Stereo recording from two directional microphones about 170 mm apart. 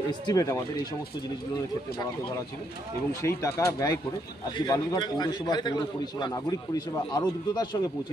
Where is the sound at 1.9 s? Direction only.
65° left (ahead or behind).